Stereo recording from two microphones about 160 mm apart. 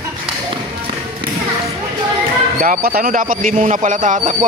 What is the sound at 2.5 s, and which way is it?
Speech, 60° right (ahead or behind).